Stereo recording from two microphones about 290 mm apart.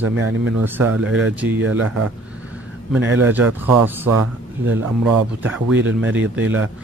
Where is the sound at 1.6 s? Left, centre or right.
Right.